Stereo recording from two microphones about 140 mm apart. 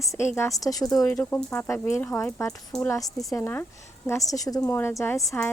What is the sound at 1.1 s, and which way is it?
A woman's voice, 10° left (ahead or behind).